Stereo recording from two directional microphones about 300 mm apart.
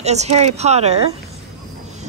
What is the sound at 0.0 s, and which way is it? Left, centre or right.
Speech, right.